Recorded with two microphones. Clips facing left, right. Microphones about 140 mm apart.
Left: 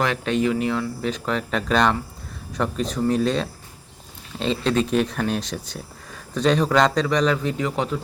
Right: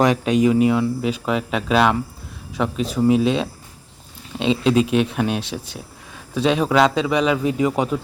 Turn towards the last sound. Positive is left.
turn(degrees=-10)  # may be behind; listen again after turning